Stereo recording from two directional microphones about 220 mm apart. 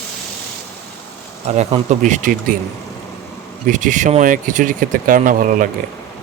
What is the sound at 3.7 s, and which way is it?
Speech, 35° right (ahead or behind).